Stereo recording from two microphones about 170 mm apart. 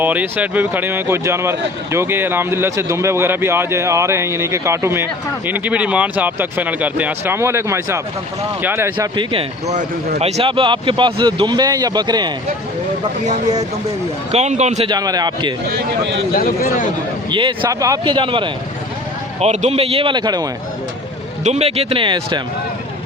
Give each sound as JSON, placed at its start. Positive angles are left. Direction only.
{"t": 0.0, "sound": "speech", "side_deg": -10}
{"t": 9.0, "sound": "a man's voice", "side_deg": -30}
{"t": 14.3, "sound": "a man's voice", "side_deg": -40}
{"t": 14.8, "sound": "speech", "side_deg": -25}
{"t": 16.3, "sound": "a man's voice", "side_deg": 60}
{"t": 17.3, "sound": "speech", "side_deg": -30}
{"t": 19.4, "sound": "a man's voice", "side_deg": -40}
{"t": 21.4, "sound": "a man's voice", "side_deg": -40}